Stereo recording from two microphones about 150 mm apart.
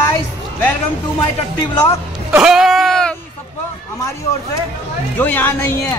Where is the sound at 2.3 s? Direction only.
5° right (ahead or behind).